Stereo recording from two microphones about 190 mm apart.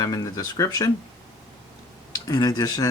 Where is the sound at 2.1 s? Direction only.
20° left (ahead or behind).